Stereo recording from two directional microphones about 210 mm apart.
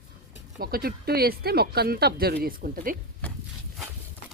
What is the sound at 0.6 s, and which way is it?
Speech, 45° right (ahead or behind).